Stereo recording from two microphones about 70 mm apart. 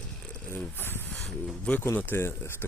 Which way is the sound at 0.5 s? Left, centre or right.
Left.